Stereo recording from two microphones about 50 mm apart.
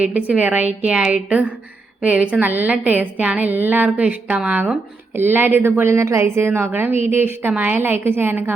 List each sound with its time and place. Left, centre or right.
0.0 s a woman's voice: right
3.8 s a woman's voice: right
5.1 s speech: right
5.9 s a woman's voice: right
6.1 s a woman's voice: right
6.7 s a woman's voice: right
7.9 s speech: right